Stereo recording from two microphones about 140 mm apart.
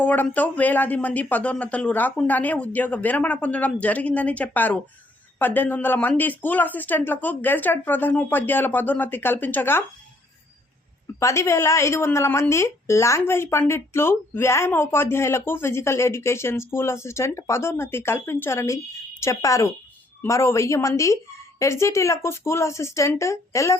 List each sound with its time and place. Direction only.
0.0 s speech: 10° left (ahead or behind)
11.2 s a woman's voice: 20° left (ahead or behind)